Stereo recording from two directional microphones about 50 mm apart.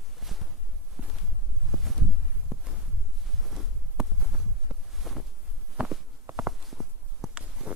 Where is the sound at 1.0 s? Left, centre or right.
Right.